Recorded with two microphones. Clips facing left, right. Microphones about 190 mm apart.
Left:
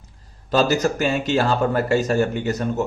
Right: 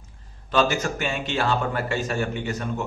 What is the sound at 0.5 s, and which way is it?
Speech, 40° left (ahead or behind).